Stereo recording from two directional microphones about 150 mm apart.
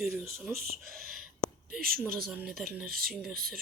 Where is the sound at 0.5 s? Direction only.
75° right (ahead or behind).